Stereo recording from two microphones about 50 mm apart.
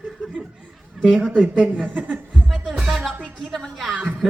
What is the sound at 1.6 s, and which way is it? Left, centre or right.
Speech, right.